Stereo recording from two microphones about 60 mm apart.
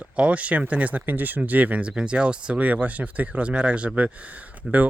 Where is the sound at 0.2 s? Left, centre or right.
Right.